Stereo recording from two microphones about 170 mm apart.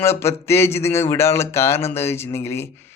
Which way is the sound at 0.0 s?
15° left (ahead or behind).